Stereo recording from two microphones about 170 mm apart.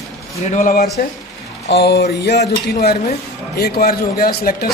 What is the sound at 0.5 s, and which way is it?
Speech, 55° left (ahead or behind).